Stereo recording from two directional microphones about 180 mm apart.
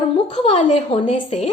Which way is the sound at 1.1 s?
40° left (ahead or behind).